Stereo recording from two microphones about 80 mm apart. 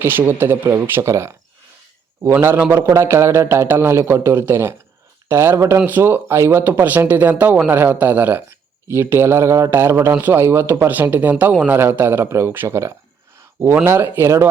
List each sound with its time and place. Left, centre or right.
0.0 s a man's voice: right
2.4 s a man's voice: right